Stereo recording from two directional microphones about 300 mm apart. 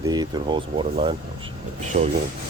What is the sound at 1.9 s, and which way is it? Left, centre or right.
Speech, right.